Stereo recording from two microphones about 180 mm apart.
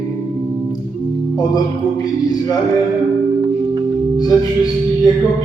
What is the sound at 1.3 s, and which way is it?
Speech, 20° left (ahead or behind).